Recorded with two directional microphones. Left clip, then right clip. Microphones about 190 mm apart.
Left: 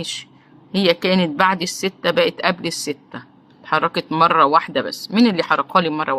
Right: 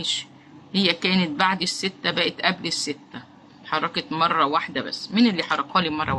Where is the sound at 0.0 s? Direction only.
35° left (ahead or behind).